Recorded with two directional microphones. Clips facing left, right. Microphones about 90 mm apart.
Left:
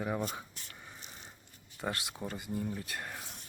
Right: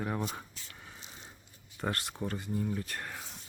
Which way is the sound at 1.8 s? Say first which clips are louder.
Right 2 dB; 5° left (ahead or behind).